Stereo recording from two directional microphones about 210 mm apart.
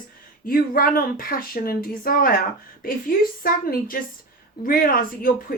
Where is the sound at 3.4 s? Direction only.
45° left (ahead or behind).